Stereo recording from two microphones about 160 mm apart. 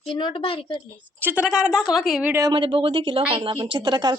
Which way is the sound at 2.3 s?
25° right (ahead or behind).